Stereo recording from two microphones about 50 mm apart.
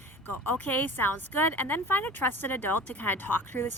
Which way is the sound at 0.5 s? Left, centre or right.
Left.